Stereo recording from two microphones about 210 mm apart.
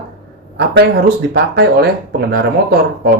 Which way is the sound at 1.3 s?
50° right (ahead or behind).